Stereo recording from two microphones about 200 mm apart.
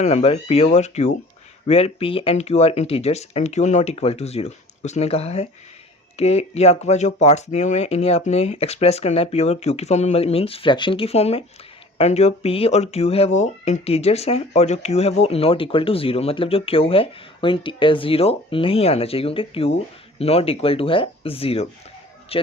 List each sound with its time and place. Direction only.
0.0 s speech: 30° left (ahead or behind)